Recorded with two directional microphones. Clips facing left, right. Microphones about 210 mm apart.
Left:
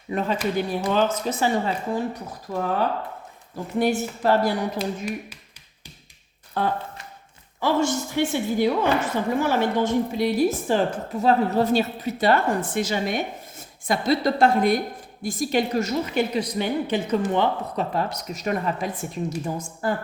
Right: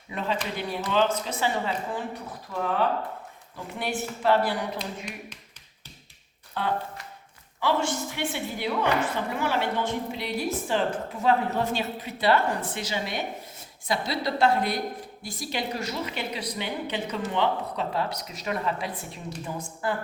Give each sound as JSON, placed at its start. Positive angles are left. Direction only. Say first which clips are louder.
{"t": 0.1, "sound": "a woman's voice", "louder": "left 6 dB", "side_deg": 45}
{"t": 4.8, "sound": "speech", "louder": "left 8 dB", "side_deg": 5}
{"t": 6.6, "sound": "a woman's voice", "louder": "left 3 dB", "side_deg": 45}